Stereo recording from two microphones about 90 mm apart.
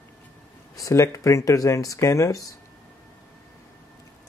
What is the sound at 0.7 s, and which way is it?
Speech, 35° left (ahead or behind).